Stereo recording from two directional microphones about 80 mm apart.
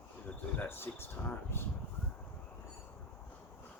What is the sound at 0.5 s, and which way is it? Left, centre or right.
Speech, left.